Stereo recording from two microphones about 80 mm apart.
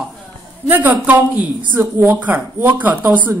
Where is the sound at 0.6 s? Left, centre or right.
Right.